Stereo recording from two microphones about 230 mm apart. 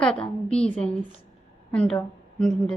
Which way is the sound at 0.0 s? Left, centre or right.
Centre.